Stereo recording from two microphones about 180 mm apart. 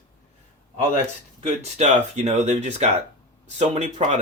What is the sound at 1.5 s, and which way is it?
Speech, 40° right (ahead or behind).